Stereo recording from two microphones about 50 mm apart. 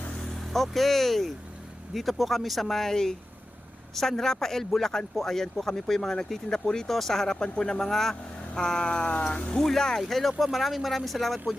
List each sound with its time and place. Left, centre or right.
0.3 s speech: centre; by 9.6 s left
9.6 s speech: centre